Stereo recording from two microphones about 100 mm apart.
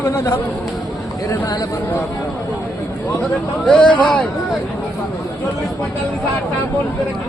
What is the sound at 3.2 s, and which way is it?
Speech, 15° left (ahead or behind).